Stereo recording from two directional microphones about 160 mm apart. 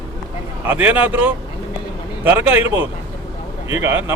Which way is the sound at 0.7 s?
10° right (ahead or behind).